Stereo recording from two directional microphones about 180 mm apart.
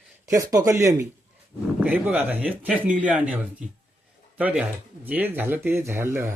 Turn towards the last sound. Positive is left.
turn(degrees=-15)  # may be behind; listen again after turning